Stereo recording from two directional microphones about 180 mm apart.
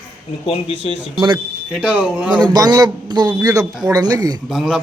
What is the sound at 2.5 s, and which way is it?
A man's voice, 20° right (ahead or behind).